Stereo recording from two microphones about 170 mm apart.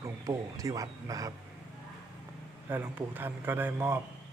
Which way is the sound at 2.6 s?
10° right (ahead or behind).